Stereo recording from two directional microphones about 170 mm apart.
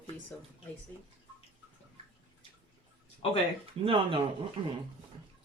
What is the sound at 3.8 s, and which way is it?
Speech, 30° right (ahead or behind).